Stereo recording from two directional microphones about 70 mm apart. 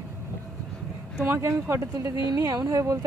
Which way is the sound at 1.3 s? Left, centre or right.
Right.